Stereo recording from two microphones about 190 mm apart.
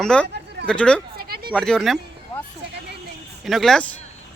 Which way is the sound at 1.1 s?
55° right (ahead or behind).